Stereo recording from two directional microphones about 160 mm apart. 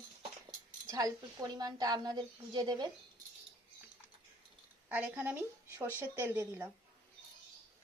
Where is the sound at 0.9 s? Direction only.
20° right (ahead or behind).